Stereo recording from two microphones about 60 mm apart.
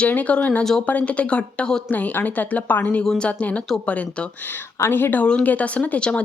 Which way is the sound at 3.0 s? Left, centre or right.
Centre.